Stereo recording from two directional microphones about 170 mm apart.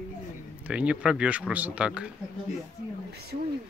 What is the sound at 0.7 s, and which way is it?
A man's voice, 5° right (ahead or behind).